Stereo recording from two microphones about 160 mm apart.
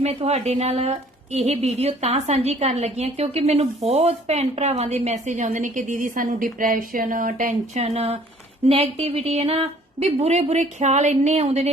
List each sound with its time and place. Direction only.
0.0 s a woman's voice: 40° right (ahead or behind)